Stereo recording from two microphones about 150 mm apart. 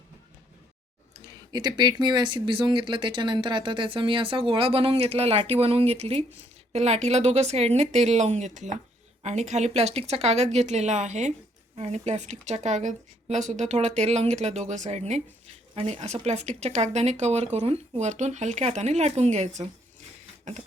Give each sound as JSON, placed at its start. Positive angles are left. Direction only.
{"t": 1.3, "sound": "speech", "side_deg": -30}